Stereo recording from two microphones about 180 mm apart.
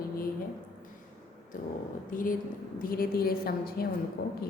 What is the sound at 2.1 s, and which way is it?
A woman's voice, 50° left (ahead or behind).